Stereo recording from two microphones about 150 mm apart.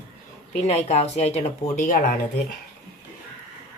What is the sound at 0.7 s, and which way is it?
Speech, 45° left (ahead or behind).